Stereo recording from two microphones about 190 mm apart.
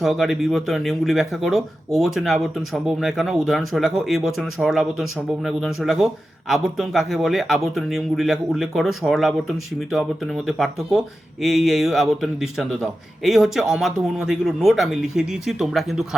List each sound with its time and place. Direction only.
0.0 s speech: centre (ahead or behind)